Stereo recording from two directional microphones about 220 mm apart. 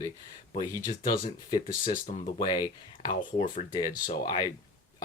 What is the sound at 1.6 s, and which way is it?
Speech, 40° left (ahead or behind).